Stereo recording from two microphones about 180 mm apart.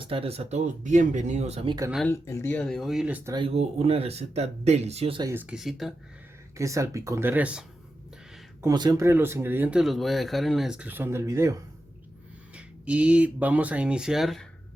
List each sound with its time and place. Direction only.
0.0 s speech: 30° right (ahead or behind)
2.0 s speech: 15° left (ahead or behind); by 3.3 s 10° right (ahead or behind)
3.3 s speech: 30° right (ahead or behind)
5.3 s speech: 10° right (ahead or behind)
6.6 s speech: 15° right (ahead or behind)
8.6 s speech: 20° right (ahead or behind)
12.5 s speech: 5° right (ahead or behind)